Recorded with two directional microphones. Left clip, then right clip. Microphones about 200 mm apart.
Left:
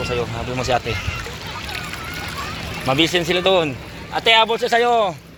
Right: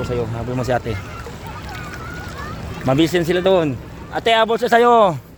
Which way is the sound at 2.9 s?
45° right (ahead or behind).